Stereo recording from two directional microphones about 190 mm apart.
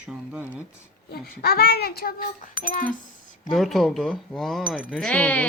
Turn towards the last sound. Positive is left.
turn(degrees=10)  # may be behind; listen again after turning